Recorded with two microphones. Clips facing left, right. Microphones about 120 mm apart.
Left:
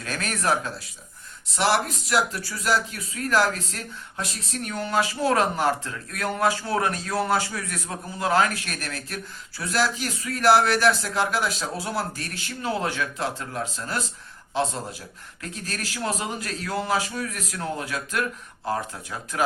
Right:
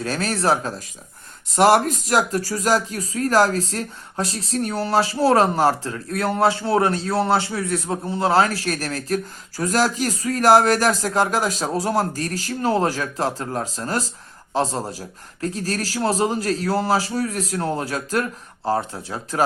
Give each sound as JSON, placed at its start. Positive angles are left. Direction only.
{"t": 0.0, "sound": "speech", "side_deg": -30}
{"t": 1.5, "sound": "speech", "side_deg": -45}